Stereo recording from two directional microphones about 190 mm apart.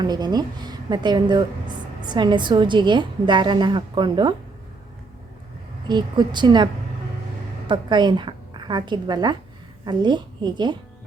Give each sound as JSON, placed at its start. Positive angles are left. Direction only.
{"t": 0.0, "sound": "a woman's voice", "side_deg": -20}
{"t": 5.9, "sound": "a woman's voice", "side_deg": -25}
{"t": 7.7, "sound": "a woman's voice", "side_deg": -25}